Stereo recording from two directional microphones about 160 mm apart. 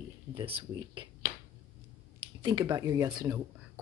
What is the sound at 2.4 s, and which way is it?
Speech, 25° right (ahead or behind).